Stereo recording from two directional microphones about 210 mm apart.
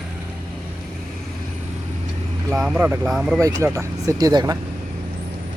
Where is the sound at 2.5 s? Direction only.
Centre (ahead or behind).